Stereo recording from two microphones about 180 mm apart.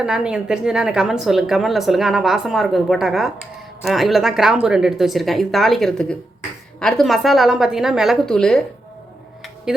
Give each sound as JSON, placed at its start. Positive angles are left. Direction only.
{"t": 0.0, "sound": "a woman's voice", "side_deg": -5}